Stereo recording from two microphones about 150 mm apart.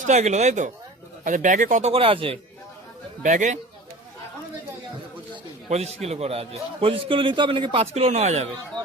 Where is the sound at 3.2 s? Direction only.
55° right (ahead or behind).